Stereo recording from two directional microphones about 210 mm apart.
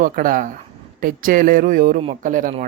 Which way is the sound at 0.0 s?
40° right (ahead or behind).